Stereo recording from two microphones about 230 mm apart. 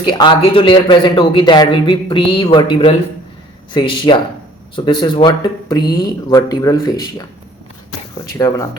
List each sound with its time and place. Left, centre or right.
0.0 s speech: centre
8.3 s speech: centre